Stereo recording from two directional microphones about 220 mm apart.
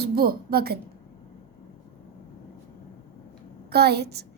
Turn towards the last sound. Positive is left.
turn(degrees=-50)  # may be behind; listen again after turning